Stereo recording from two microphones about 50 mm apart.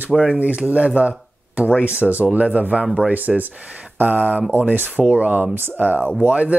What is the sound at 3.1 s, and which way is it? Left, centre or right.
A man's voice, right.